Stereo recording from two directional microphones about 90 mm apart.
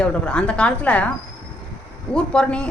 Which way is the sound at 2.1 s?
10° left (ahead or behind).